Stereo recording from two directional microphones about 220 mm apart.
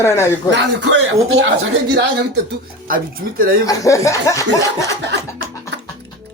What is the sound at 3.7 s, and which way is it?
Chuckle, 15° left (ahead or behind).